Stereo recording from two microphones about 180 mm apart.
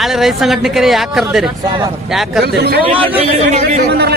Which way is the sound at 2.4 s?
65° right (ahead or behind).